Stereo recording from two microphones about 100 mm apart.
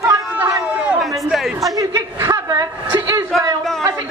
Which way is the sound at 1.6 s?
35° right (ahead or behind).